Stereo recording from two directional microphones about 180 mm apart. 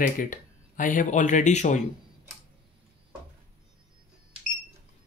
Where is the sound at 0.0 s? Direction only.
45° left (ahead or behind).